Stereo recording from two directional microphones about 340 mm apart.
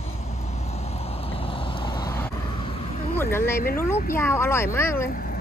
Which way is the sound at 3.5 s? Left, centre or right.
Left.